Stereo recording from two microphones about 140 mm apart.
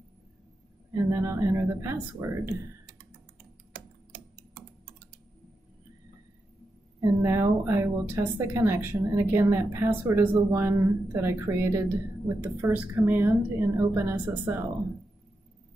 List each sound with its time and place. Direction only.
0.9 s speech: 20° right (ahead or behind)
7.0 s a woman's voice: 20° right (ahead or behind)